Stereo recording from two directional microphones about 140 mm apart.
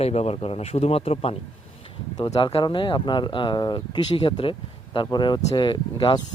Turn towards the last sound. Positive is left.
turn(degrees=35)  # may be behind; listen again after turning